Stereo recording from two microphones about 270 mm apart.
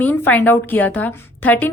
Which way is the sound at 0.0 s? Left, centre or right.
Centre.